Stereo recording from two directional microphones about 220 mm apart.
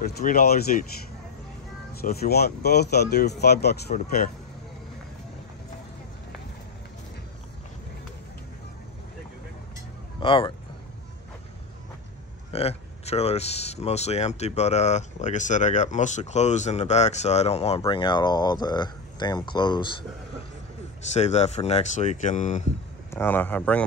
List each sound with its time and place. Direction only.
0.0 s speech: 40° left (ahead or behind)
2.0 s speech: 45° left (ahead or behind)
10.2 s speech: 25° left (ahead or behind)
12.5 s speech: 30° left (ahead or behind)
21.1 s speech: 30° left (ahead or behind)
23.1 s speech: 10° left (ahead or behind)